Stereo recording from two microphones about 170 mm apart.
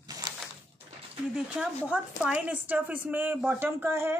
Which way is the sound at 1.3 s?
5° right (ahead or behind).